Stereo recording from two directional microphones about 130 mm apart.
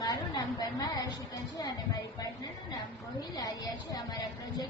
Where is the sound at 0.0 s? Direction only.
30° left (ahead or behind).